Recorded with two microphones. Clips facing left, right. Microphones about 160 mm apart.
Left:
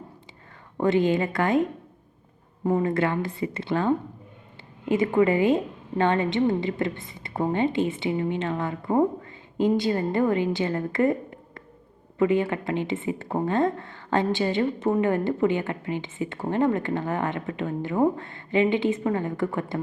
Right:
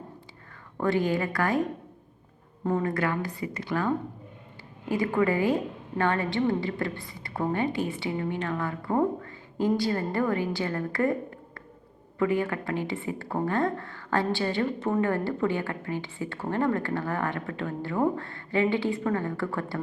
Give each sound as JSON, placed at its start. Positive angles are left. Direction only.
{"t": 0.8, "sound": "a woman's voice", "side_deg": 20}
{"t": 2.6, "sound": "a woman's voice", "side_deg": 15}
{"t": 2.9, "sound": "a woman's voice", "side_deg": 25}